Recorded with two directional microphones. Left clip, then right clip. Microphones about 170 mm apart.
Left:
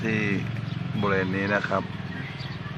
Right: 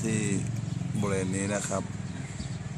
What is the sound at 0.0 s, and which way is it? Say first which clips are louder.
Vehicle: left 5 dB; 15° right (ahead or behind).